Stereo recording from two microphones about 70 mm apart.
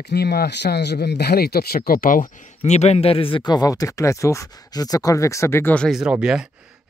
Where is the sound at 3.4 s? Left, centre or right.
Left.